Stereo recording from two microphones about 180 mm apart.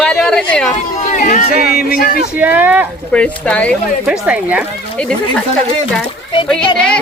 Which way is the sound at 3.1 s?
5° left (ahead or behind).